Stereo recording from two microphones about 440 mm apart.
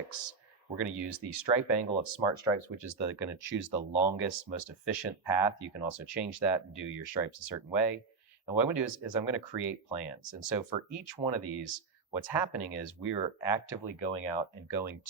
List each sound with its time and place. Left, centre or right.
0.1 s speech: left